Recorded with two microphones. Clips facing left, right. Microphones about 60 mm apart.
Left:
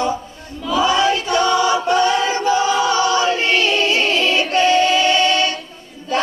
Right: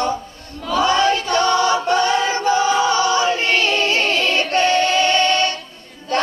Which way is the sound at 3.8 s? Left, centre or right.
Right.